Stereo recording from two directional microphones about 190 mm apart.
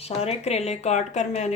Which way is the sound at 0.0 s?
35° left (ahead or behind).